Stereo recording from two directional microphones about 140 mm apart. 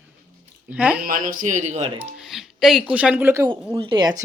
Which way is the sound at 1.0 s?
85° right.